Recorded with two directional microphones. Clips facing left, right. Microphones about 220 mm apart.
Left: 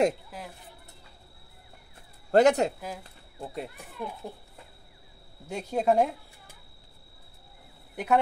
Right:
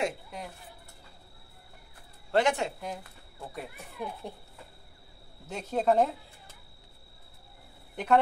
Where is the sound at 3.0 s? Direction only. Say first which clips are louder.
Left 4 dB; 25° left (ahead or behind).